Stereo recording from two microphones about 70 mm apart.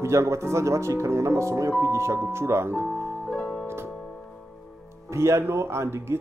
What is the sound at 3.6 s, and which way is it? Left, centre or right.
Music, right.